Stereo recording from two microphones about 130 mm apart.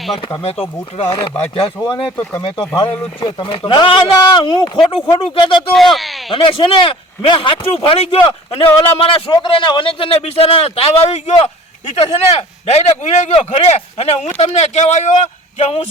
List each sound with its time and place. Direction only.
0.9 s speech: 50° left (ahead or behind)
5.7 s speech: centre (ahead or behind)
6.3 s a man's voice: 40° left (ahead or behind)